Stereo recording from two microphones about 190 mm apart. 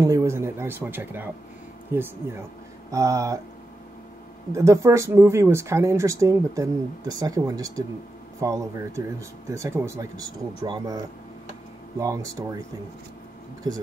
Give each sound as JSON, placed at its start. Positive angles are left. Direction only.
{"t": 0.0, "sound": "speech", "side_deg": -15}
{"t": 4.5, "sound": "speech", "side_deg": -15}
{"t": 12.0, "sound": "speech", "side_deg": -15}
{"t": 13.7, "sound": "speech", "side_deg": -20}